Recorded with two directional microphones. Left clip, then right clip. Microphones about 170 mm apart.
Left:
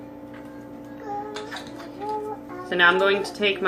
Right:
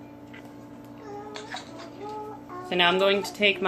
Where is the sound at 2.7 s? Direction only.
35° right (ahead or behind).